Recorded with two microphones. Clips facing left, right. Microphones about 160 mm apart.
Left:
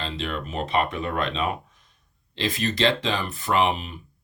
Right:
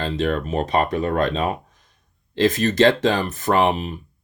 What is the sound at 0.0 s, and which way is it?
Speech, 45° right (ahead or behind).